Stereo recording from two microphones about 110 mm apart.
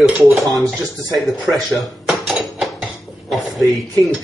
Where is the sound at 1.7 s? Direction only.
Centre (ahead or behind).